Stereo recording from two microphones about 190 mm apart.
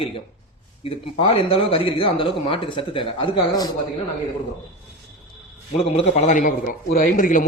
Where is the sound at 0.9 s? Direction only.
30° left (ahead or behind).